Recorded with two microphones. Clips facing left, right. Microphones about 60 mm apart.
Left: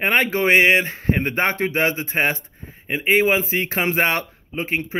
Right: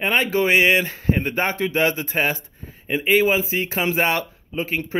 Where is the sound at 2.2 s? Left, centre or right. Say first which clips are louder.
Left 2 dB; left.